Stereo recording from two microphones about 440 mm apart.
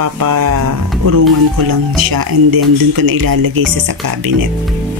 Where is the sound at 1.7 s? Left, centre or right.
Right.